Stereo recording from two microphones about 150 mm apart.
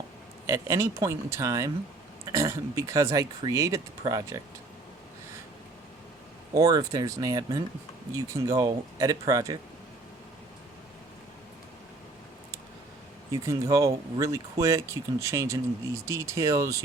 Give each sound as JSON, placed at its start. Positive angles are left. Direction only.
{"t": 0.4, "sound": "speech", "side_deg": -20}
{"t": 6.5, "sound": "speech", "side_deg": -25}
{"t": 13.3, "sound": "speech", "side_deg": -20}